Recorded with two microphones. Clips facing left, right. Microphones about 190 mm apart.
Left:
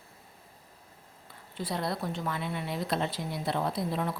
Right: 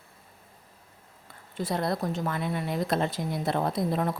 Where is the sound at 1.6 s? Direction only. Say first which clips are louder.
Right 4 dB; 45° right (ahead or behind).